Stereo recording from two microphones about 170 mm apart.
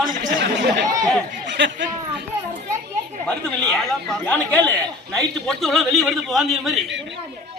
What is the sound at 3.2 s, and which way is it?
A man's voice, 5° left (ahead or behind).